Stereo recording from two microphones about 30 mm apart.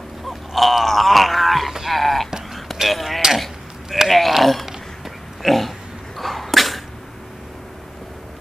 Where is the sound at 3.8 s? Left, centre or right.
Centre.